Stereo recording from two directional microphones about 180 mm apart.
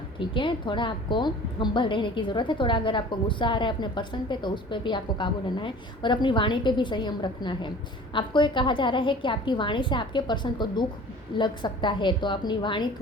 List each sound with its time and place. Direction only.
0.2 s a woman's voice: 25° left (ahead or behind)